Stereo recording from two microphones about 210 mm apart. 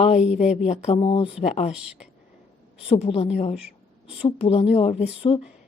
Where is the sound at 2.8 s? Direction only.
30° left (ahead or behind).